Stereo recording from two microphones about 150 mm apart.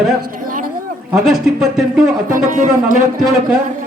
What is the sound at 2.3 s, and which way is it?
Speech, 65° right (ahead or behind).